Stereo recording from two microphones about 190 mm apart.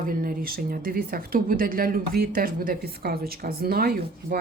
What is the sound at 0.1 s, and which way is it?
A woman's voice, 50° right (ahead or behind).